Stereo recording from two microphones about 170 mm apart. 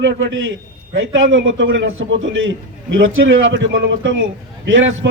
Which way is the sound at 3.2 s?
90° right.